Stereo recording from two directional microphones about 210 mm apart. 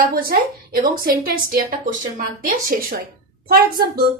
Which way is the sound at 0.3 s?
45° right (ahead or behind).